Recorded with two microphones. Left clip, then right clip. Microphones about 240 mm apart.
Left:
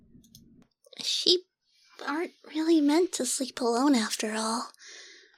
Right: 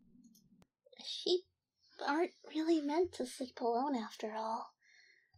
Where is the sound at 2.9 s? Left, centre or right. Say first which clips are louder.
Left 10 dB; left.